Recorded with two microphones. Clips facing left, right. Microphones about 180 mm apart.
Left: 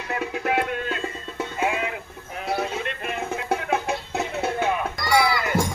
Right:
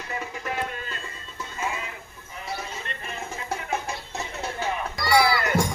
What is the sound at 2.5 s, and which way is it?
Music, 65° left (ahead or behind).